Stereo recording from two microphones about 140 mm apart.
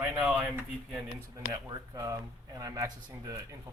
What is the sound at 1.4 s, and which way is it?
Speech, 30° right (ahead or behind).